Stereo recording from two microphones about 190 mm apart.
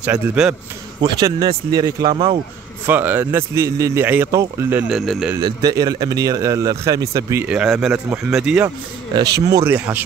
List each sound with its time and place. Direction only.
0.0 s a man's voice: 5° right (ahead or behind)
1.0 s speech: 20° right (ahead or behind)
2.9 s a man's voice: 10° right (ahead or behind)
4.9 s a man's voice: centre (ahead or behind)
5.4 s a man's voice: 20° right (ahead or behind); by 8.6 s 5° right (ahead or behind)
8.6 s a man's voice: 20° right (ahead or behind)